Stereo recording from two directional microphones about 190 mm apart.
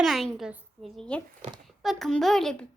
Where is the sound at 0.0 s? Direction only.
Centre (ahead or behind).